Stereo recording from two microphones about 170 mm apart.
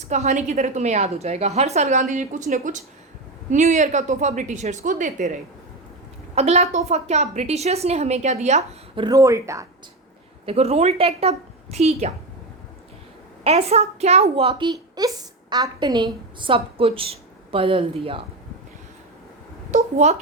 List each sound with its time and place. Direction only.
0.0 s a woman's voice: 40° right (ahead or behind)
6.3 s a woman's voice: 40° right (ahead or behind)
9.0 s speech: 20° right (ahead or behind)
10.4 s a woman's voice: 40° right (ahead or behind)
13.4 s a woman's voice: 40° right (ahead or behind)
14.7 s a woman's voice: 25° right (ahead or behind)
19.7 s a woman's voice: 40° right (ahead or behind)